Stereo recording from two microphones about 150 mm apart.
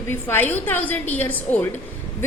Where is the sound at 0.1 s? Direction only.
15° left (ahead or behind).